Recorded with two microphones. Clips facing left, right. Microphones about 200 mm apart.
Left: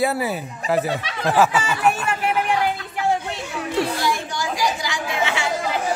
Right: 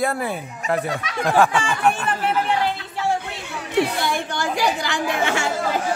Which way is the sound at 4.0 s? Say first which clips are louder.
Even; 60° right (ahead or behind).